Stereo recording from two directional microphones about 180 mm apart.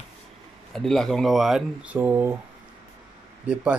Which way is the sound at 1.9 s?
10° right (ahead or behind).